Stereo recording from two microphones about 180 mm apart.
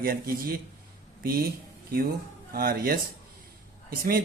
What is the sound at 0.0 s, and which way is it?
Speech, 55° right (ahead or behind).